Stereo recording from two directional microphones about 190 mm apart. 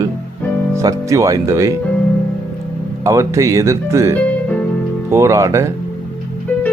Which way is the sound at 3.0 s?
15° right (ahead or behind).